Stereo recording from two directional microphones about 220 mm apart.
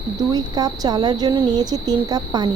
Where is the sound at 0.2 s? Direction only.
15° right (ahead or behind).